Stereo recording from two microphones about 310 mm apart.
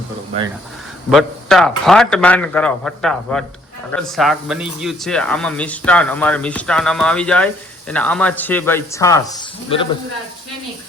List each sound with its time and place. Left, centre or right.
1.1 s speech: centre